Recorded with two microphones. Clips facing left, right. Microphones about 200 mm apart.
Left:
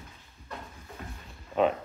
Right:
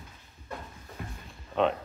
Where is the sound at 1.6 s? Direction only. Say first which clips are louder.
Left 1 dB; 5° left (ahead or behind).